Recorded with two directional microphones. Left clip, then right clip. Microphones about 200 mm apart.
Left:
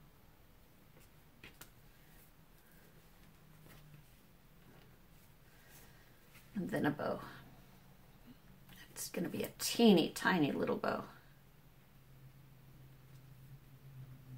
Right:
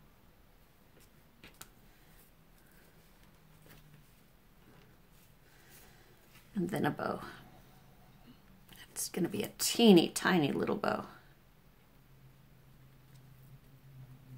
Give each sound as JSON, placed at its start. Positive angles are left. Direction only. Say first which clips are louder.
{"t": 6.7, "sound": "speech", "louder": "right 1 dB", "side_deg": -45}
{"t": 8.6, "sound": "speech", "louder": "right 5 dB", "side_deg": -45}